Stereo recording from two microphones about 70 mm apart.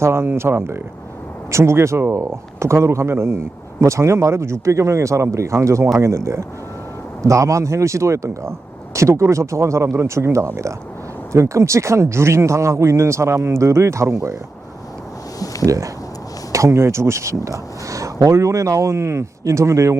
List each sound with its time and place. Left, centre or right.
0.0 s speech: right
15.6 s speech: right